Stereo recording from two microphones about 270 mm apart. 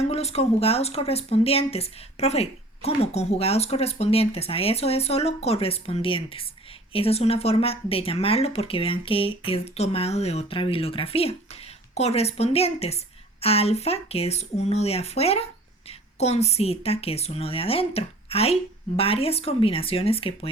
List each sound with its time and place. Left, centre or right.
0.1 s speech: left